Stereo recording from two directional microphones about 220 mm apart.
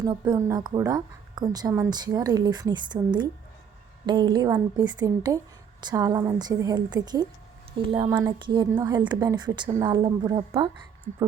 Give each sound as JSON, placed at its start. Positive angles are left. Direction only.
{"t": 0.0, "sound": "a woman's voice", "side_deg": -20}